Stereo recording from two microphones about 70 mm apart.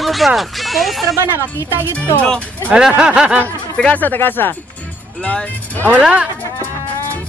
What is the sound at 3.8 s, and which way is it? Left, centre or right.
Speech, left.